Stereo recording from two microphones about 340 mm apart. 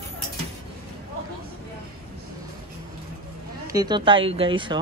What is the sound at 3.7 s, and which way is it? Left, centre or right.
Speech, centre.